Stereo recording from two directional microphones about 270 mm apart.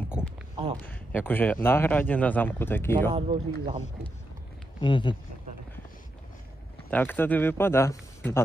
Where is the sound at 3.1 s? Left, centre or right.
Right.